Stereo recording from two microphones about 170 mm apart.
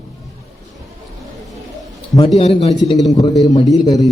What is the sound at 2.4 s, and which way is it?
Speech, 35° left (ahead or behind).